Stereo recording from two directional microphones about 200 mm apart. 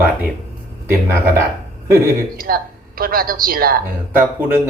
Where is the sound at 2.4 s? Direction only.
45° right (ahead or behind).